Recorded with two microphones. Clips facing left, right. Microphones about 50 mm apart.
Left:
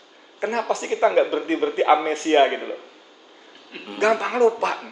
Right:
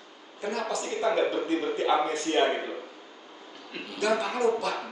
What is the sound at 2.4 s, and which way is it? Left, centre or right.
Speech, left.